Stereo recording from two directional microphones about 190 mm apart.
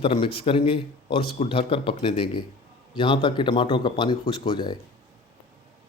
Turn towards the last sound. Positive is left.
turn(degrees=25)  # may be behind; listen again after turning